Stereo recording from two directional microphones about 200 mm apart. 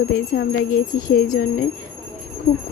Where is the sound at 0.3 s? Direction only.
45° left (ahead or behind).